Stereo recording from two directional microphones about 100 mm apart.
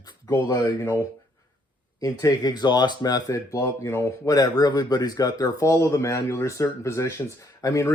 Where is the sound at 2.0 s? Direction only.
35° left (ahead or behind).